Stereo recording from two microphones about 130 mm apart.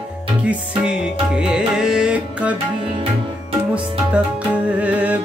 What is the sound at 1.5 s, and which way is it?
Music, 5° right (ahead or behind).